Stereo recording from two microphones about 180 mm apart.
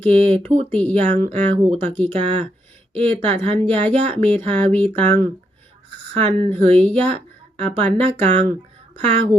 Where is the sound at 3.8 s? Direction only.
10° left (ahead or behind).